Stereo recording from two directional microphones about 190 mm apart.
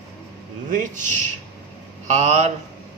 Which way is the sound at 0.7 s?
40° right (ahead or behind).